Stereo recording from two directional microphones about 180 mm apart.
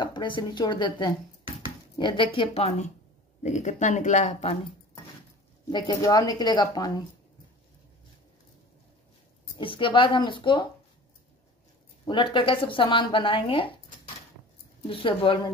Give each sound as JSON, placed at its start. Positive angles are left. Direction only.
{"t": 0.0, "sound": "speech", "side_deg": 25}
{"t": 5.7, "sound": "speech", "side_deg": 25}
{"t": 9.6, "sound": "speech", "side_deg": 30}
{"t": 12.0, "sound": "speech", "side_deg": 30}